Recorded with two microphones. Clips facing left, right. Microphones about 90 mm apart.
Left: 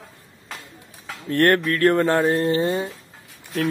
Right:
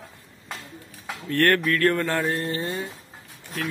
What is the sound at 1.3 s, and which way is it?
Speech, 20° left (ahead or behind).